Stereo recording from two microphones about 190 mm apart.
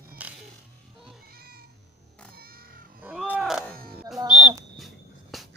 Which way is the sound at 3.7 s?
50° right (ahead or behind).